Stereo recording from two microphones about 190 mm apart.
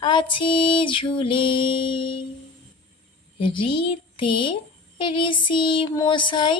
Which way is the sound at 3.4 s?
25° left (ahead or behind).